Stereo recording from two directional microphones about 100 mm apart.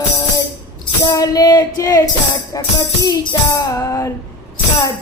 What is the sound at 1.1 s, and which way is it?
Music, 40° left (ahead or behind).